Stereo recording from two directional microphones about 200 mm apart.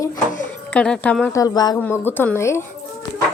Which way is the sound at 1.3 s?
20° left (ahead or behind).